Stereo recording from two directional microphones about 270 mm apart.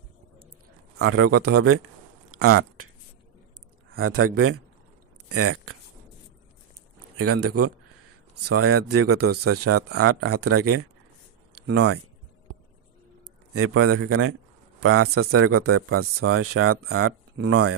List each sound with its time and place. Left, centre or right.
0.9 s a man's voice: right
2.3 s a sound: right
3.9 s a man's voice: right
7.2 s a man's voice: right
9.2 s speech: right
9.5 s speech: right
13.5 s a man's voice: right